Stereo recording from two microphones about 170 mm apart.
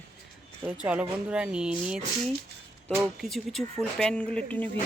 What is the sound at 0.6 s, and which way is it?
Speech, 5° right (ahead or behind).